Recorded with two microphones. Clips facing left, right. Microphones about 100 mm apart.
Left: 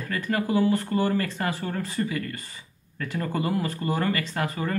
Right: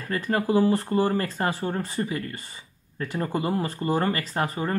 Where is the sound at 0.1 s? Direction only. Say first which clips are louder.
Right 2 dB; 30° right (ahead or behind).